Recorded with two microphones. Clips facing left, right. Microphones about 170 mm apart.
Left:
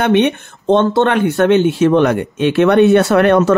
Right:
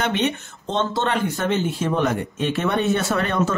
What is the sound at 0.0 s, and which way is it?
A man's voice, 60° left (ahead or behind).